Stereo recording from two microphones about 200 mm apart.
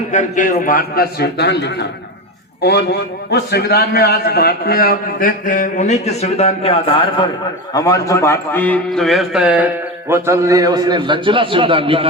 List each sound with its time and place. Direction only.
0.1 s a man's voice: 40° left (ahead or behind); by 12.0 s 25° right (ahead or behind)